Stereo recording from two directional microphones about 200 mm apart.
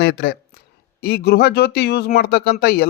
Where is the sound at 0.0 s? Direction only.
55° left (ahead or behind).